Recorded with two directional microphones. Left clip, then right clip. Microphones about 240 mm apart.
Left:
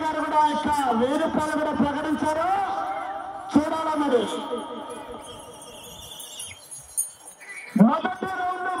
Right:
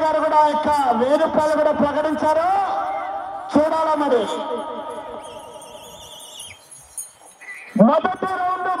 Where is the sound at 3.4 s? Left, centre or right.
Centre.